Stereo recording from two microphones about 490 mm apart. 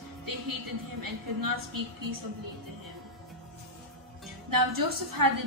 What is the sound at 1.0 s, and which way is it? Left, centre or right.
A woman's voice, right.